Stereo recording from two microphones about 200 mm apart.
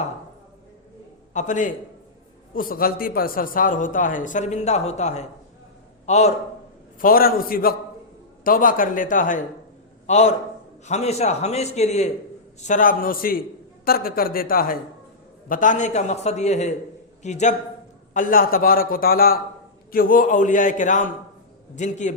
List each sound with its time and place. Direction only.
1.3 s a man's voice: 40° left (ahead or behind)
7.0 s a man's voice: 45° left (ahead or behind)